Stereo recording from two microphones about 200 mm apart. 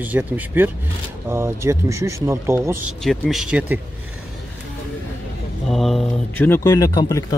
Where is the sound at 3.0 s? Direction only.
Centre (ahead or behind).